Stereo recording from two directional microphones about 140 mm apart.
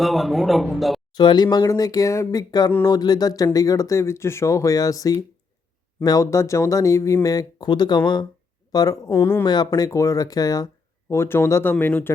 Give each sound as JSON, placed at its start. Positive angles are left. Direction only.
{"t": 0.0, "sound": "a man's voice", "side_deg": 0}
{"t": 1.1, "sound": "speech", "side_deg": 30}
{"t": 9.4, "sound": "speech", "side_deg": 30}